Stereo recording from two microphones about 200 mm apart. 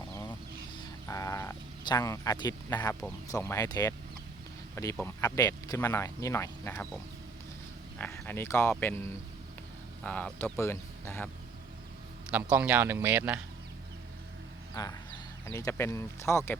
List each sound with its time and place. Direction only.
0.1 s a sound: 15° left (ahead or behind)
1.0 s sheep: 15° left (ahead or behind)
3.3 s speech: 15° left (ahead or behind)
7.9 s speech: 10° left (ahead or behind)
12.3 s speech: 5° right (ahead or behind)
15.4 s speech: 15° left (ahead or behind)